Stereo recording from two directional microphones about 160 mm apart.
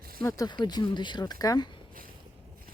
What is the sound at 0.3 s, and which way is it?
Speech, 25° left (ahead or behind).